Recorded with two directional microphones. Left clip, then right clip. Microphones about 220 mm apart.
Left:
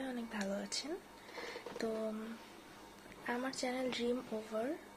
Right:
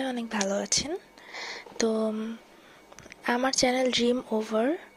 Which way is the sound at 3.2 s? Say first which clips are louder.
Right 14 dB; 45° right (ahead or behind).